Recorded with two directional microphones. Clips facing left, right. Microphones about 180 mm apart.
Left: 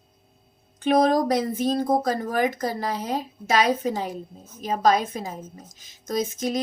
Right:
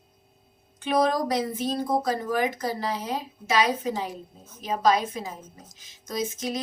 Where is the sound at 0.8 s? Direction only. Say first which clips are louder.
Left 4 dB; 45° left (ahead or behind).